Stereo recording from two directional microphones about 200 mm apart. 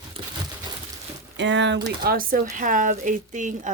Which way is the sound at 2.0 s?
45° right (ahead or behind).